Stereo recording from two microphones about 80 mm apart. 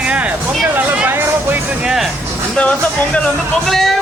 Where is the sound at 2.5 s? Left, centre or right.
Centre.